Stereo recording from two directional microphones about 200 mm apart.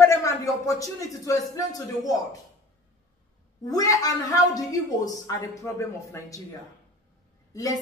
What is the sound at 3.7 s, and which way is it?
Speech, 20° left (ahead or behind).